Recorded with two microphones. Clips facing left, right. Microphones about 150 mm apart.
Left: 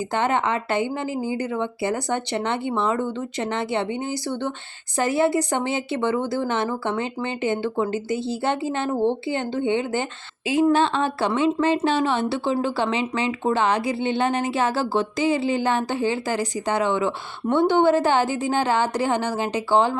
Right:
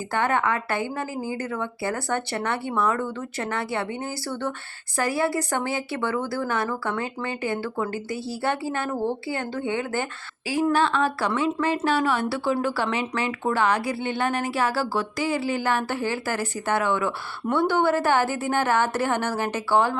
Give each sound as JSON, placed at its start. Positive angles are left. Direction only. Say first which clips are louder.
{"t": 0.1, "sound": "a woman's voice", "louder": "even", "side_deg": 20}